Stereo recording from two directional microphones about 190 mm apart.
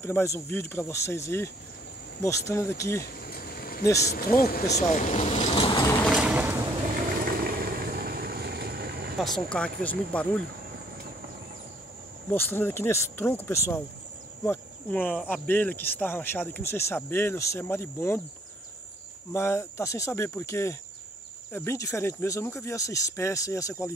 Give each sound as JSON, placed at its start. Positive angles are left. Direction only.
{"t": 0.0, "sound": "speech", "side_deg": 10}
{"t": 3.2, "sound": "vehicle", "side_deg": 55}
{"t": 3.8, "sound": "speech", "side_deg": 15}
{"t": 4.2, "sound": "speech", "side_deg": 50}
{"t": 4.7, "sound": "speech", "side_deg": 40}
{"t": 6.0, "sound": "a sound", "side_deg": -5}
{"t": 7.2, "sound": "vehicle", "side_deg": -50}
{"t": 9.2, "sound": "speech", "side_deg": 5}
{"t": 12.3, "sound": "speech", "side_deg": 10}
{"t": 19.3, "sound": "speech", "side_deg": 15}